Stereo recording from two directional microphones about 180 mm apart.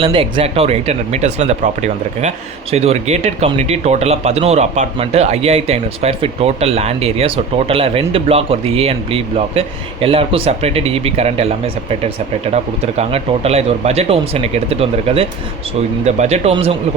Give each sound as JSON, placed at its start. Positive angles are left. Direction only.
{"t": 0.0, "sound": "speech", "side_deg": -30}